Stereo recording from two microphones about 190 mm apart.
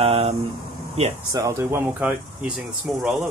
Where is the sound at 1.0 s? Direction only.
35° right (ahead or behind).